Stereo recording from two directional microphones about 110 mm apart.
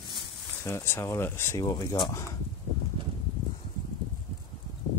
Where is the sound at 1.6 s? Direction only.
40° left (ahead or behind).